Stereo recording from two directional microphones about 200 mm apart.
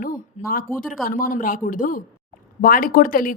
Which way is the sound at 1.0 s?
45° left (ahead or behind).